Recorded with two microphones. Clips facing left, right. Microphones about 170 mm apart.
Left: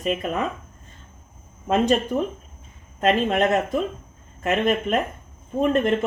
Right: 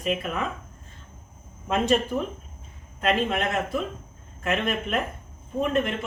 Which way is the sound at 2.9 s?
40° left (ahead or behind).